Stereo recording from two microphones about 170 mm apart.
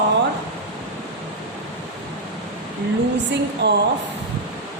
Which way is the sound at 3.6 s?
80° right.